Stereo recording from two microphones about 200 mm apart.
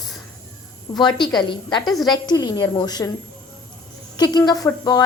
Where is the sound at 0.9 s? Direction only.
20° left (ahead or behind).